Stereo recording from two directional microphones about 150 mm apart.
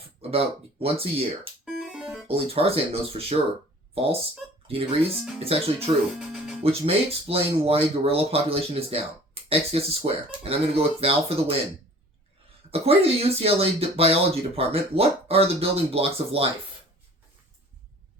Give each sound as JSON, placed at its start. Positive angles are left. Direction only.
{"t": 0.2, "sound": "speech", "side_deg": -40}
{"t": 1.8, "sound": "music", "side_deg": -5}
{"t": 2.2, "sound": "speech", "side_deg": -40}
{"t": 6.1, "sound": "music", "side_deg": -5}
{"t": 6.6, "sound": "speech", "side_deg": -40}
{"t": 12.7, "sound": "speech", "side_deg": -40}